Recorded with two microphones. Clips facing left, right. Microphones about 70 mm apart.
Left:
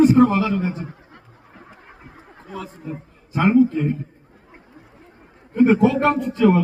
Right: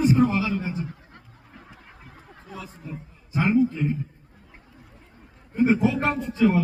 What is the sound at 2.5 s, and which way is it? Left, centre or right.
A man's voice, left.